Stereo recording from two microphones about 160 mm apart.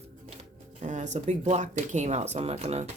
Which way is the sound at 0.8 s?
45° right (ahead or behind).